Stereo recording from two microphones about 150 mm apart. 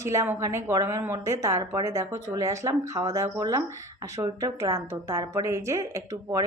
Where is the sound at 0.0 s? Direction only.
20° right (ahead or behind).